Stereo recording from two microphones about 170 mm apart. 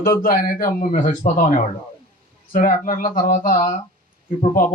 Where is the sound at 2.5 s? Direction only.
55° left (ahead or behind).